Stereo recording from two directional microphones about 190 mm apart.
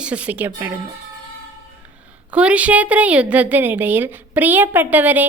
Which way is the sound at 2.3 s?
5° right (ahead or behind).